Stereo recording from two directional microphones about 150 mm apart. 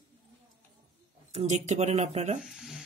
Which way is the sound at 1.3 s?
50° right (ahead or behind).